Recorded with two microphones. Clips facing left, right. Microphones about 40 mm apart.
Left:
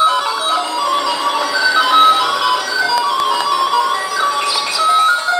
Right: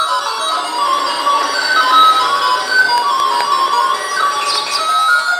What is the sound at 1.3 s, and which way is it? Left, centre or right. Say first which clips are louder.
Music: right 1 dB; centre.